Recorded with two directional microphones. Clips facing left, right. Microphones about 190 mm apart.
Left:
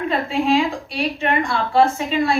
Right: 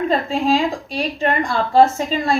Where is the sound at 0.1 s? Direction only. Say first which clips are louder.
Left 2 dB; 35° right (ahead or behind).